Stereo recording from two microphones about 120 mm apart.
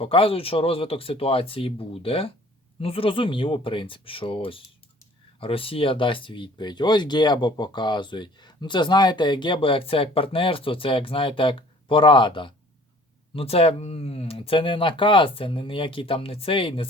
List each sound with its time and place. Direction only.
0.0 s speech: 50° left (ahead or behind)
13.3 s speech: 55° left (ahead or behind)